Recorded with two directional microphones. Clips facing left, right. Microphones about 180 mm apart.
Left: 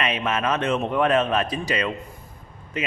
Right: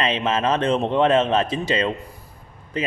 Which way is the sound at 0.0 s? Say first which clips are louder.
Right 3 dB; 30° right (ahead or behind).